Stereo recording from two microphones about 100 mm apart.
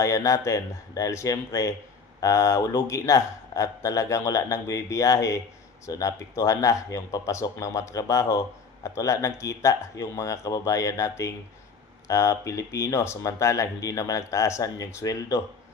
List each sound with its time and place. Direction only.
0.0 s speech: 30° left (ahead or behind)